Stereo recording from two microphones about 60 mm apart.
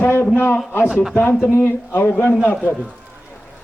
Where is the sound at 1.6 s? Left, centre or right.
Left.